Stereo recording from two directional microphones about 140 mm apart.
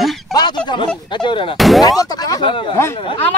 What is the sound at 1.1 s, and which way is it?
Speech, 35° left (ahead or behind).